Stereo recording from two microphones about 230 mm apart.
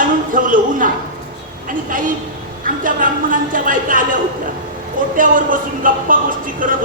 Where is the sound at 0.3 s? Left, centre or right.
Right.